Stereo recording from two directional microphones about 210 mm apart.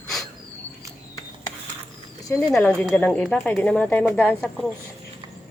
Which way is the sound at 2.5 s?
5° left (ahead or behind).